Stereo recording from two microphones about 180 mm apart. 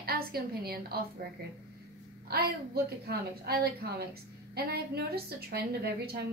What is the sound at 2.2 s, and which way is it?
A woman's voice, 60° right (ahead or behind).